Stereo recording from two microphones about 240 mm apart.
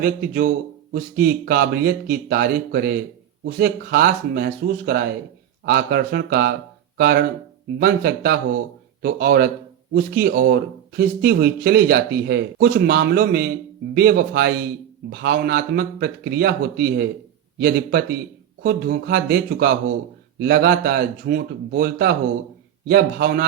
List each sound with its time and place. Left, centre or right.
0.0 s speech: right